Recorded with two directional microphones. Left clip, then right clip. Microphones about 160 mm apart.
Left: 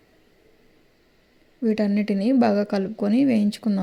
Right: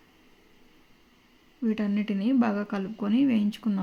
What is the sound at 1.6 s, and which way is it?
A woman's voice, 30° left (ahead or behind).